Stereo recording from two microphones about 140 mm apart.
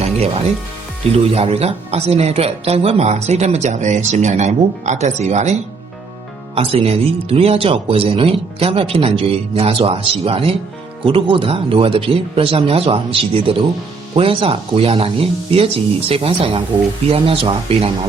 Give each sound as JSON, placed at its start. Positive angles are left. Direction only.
{"t": 0.0, "sound": "speech", "side_deg": -50}
{"t": 6.6, "sound": "speech", "side_deg": -45}